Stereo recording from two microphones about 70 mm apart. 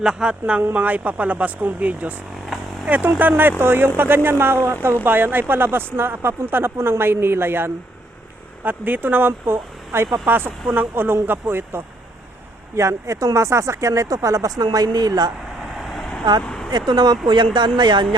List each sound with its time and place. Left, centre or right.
0.0 s speech: centre; by 4.9 s right
5.0 s speech: right
12.7 s speech: right
15.5 s vehicle: centre
16.4 s a sound: centre
16.7 s speech: right